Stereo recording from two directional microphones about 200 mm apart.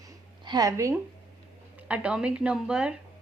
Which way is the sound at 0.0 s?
20° right (ahead or behind).